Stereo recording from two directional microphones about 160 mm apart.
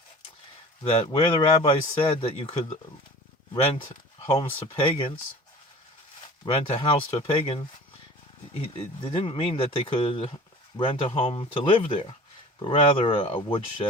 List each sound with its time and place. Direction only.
0.9 s a man's voice: 35° left (ahead or behind)
6.4 s a man's voice: 35° left (ahead or behind)